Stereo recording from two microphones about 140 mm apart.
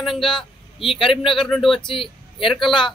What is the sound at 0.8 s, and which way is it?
Speech, 40° left (ahead or behind).